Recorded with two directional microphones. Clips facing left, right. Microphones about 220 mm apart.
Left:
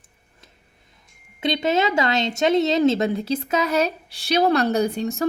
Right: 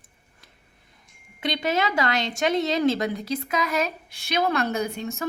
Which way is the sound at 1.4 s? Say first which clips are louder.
Left 4 dB; 25° left (ahead or behind).